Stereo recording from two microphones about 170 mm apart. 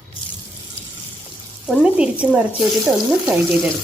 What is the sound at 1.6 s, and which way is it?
Speech, 5° right (ahead or behind).